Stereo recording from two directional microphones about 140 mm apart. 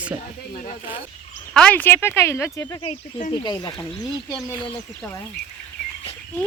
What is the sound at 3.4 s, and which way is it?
Speech, 30° left (ahead or behind).